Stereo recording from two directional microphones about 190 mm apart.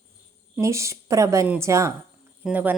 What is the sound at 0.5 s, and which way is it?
A woman's voice, 15° right (ahead or behind).